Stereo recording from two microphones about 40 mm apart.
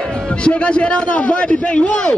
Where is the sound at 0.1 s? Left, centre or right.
Left.